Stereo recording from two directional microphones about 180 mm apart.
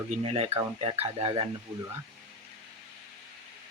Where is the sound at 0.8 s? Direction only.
35° right (ahead or behind).